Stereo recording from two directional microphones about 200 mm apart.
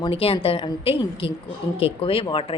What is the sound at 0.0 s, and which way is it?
Speech, 30° left (ahead or behind).